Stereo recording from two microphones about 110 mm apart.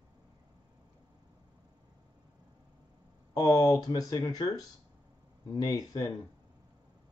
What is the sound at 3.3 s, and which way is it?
Speech, 35° left (ahead or behind).